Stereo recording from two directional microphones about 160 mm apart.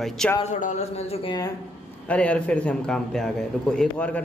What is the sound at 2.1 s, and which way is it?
A man's voice, 10° left (ahead or behind).